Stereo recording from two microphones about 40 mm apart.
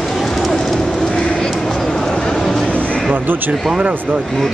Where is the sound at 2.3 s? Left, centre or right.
Centre.